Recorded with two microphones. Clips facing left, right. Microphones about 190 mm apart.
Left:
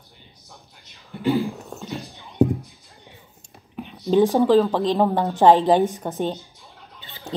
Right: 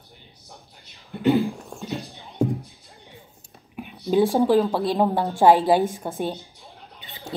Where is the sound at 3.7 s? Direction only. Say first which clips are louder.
Left 2 dB; 10° right (ahead or behind).